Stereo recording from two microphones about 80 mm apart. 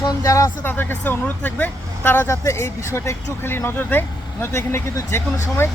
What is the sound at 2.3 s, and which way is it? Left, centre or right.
Speech, left.